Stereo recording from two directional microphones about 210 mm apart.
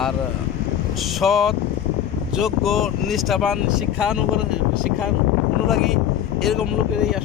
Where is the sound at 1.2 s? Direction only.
Centre (ahead or behind).